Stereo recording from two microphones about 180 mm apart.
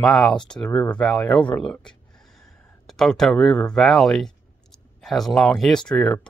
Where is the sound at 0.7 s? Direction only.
25° left (ahead or behind).